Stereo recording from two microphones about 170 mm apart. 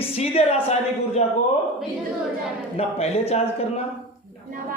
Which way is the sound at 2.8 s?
35° left (ahead or behind).